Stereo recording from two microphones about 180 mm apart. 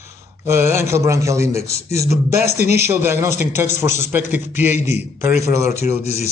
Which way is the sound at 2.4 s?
60° right (ahead or behind).